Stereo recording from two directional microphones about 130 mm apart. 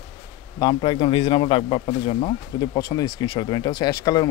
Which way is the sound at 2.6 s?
30° left (ahead or behind).